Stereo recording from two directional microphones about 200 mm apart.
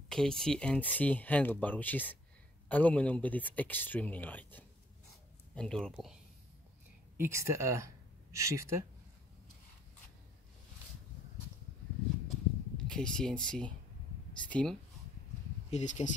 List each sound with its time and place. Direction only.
0.1 s speech: 5° left (ahead or behind)
7.2 s speech: 10° right (ahead or behind)
12.7 s speech: 5° left (ahead or behind)
15.7 s speech: 35° left (ahead or behind)